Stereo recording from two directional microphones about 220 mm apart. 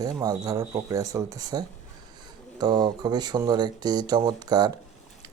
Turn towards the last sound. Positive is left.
turn(degrees=-20)  # may be behind; listen again after turning